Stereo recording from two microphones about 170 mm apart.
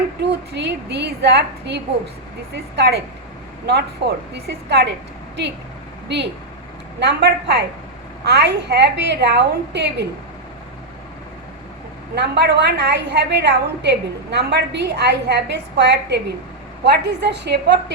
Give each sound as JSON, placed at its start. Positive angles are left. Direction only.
{"t": 0.2, "sound": "a woman's voice", "side_deg": -90}
{"t": 7.0, "sound": "a woman's voice", "side_deg": -85}
{"t": 12.1, "sound": "a woman's voice", "side_deg": -90}